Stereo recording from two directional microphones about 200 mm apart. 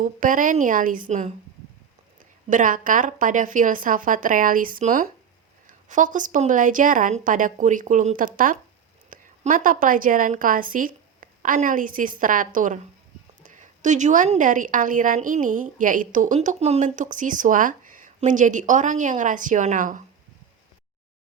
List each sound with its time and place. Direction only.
0.0 s a woman's voice: 40° right (ahead or behind)
2.5 s a woman's voice: 40° right (ahead or behind)